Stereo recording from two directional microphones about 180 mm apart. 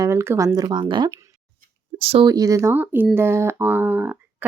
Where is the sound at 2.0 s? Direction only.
35° right (ahead or behind).